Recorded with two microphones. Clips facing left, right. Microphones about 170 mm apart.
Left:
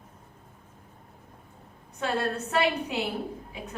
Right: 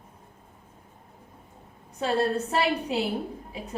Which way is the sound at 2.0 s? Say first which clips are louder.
Right 4 dB; 35° right (ahead or behind).